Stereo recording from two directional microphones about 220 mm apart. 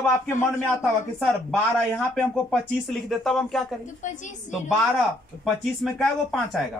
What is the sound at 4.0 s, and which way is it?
Speech, 35° left (ahead or behind).